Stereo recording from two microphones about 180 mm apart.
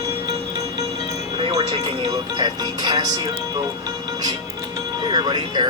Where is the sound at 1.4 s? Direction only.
30° right (ahead or behind).